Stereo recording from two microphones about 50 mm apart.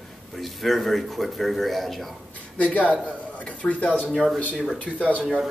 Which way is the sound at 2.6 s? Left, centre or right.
Left.